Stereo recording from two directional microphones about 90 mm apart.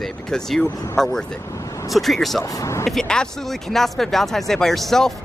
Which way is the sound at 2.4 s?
35° left (ahead or behind).